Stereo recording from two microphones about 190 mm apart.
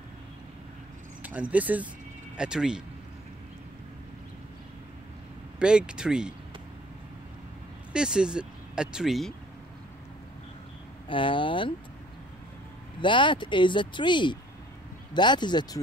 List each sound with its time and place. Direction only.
1.2 s speech: 10° right (ahead or behind)
5.6 s speech: 5° right (ahead or behind)
7.9 s speech: 5° right (ahead or behind)
11.1 s speech: 25° left (ahead or behind)
13.0 s speech: 25° left (ahead or behind)